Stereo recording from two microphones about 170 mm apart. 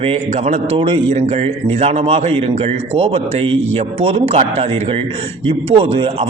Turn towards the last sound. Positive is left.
turn(degrees=-35)  # may be behind; listen again after turning